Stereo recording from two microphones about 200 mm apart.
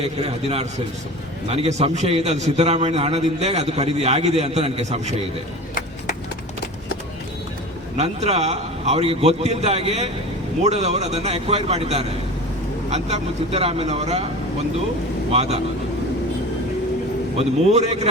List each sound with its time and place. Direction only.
0.2 s a man's voice: 30° right (ahead or behind)
7.9 s a man's voice: 30° right (ahead or behind)
15.3 s a man's voice: 30° right (ahead or behind)
17.3 s a man's voice: 30° right (ahead or behind)